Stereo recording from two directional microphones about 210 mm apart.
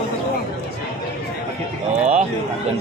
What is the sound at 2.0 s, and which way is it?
Speech, 35° right (ahead or behind).